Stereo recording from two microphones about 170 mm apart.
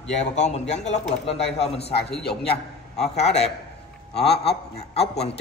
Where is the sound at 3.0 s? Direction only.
40° left (ahead or behind).